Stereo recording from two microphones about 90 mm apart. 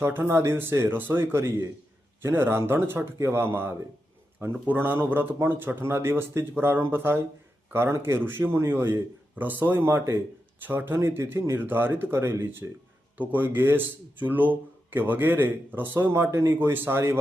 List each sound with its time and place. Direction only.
0.0 s speech: 25° right (ahead or behind)